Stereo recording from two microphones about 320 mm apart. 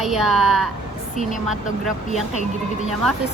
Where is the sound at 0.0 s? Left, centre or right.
Centre.